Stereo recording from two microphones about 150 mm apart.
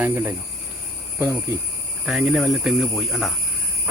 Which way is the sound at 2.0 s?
5° right (ahead or behind).